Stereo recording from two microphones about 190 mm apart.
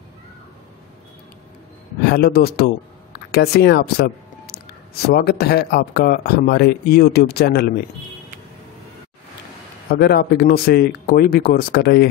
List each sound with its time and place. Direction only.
2.0 s speech: 55° left (ahead or behind)
9.8 s speech: 55° left (ahead or behind)